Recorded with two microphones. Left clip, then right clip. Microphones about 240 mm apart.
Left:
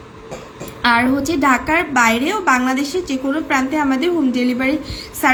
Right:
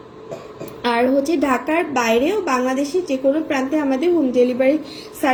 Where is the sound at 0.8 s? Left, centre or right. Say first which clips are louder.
Left 2 dB; centre.